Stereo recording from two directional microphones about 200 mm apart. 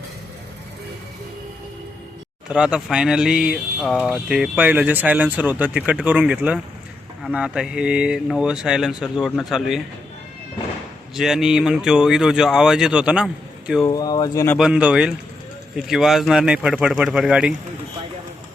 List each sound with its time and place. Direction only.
2.5 s speech: 5° right (ahead or behind)
11.1 s speech: centre (ahead or behind)
13.8 s speech: 20° left (ahead or behind)
14.6 s speech: 5° right (ahead or behind)